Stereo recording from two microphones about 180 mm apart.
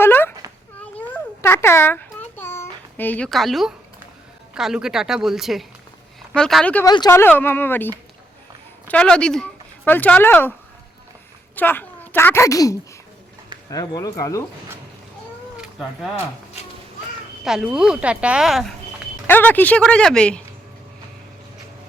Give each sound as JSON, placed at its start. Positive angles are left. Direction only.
{"t": 0.0, "sound": "a sound", "side_deg": 10}
{"t": 0.8, "sound": "babbling", "side_deg": 10}
{"t": 4.5, "sound": "a woman's voice", "side_deg": -5}
{"t": 6.8, "sound": "speech", "side_deg": 20}
{"t": 11.5, "sound": "speech", "side_deg": 10}
{"t": 17.4, "sound": "a woman's voice", "side_deg": -5}
{"t": 19.3, "sound": "speech", "side_deg": 10}